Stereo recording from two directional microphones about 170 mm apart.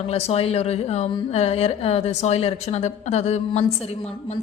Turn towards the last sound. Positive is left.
turn(degrees=40)  # may be behind; listen again after turning